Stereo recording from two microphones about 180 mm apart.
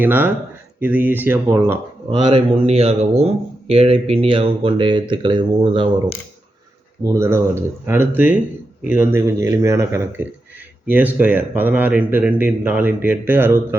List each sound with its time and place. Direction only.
0.0 s a man's voice: 10° right (ahead or behind)
2.0 s speech: 30° right (ahead or behind)
7.0 s a man's voice: 15° right (ahead or behind)